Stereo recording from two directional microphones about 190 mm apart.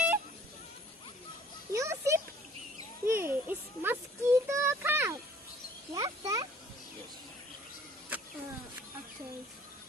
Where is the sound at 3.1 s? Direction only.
10° right (ahead or behind).